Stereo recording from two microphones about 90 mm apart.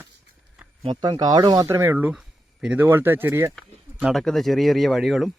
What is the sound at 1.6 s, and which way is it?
Speech, 30° right (ahead or behind).